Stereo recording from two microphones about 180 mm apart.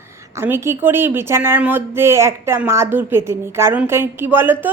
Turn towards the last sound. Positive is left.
turn(degrees=-10)  # may be behind; listen again after turning